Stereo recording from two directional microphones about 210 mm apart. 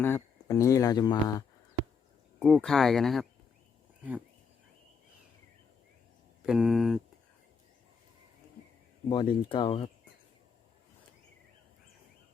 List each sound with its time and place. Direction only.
0.0 s speech: 15° left (ahead or behind)
2.4 s speech: centre (ahead or behind)
6.4 s speech: 5° right (ahead or behind)
9.0 s speech: 20° left (ahead or behind)